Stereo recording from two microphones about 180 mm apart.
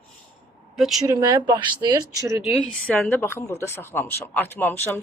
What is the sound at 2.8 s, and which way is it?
Speech, 10° left (ahead or behind).